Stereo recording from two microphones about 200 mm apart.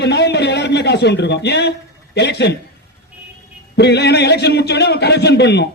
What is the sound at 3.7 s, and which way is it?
A man's voice, 55° left (ahead or behind).